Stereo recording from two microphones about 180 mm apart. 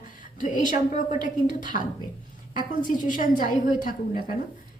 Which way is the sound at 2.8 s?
45° left (ahead or behind).